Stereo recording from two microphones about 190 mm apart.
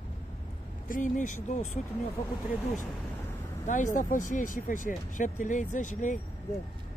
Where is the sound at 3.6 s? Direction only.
40° left (ahead or behind).